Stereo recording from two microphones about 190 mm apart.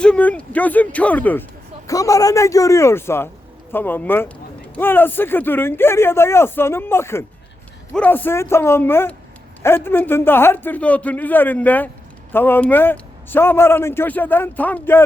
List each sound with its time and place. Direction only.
0.0 s a man's voice: 5° left (ahead or behind)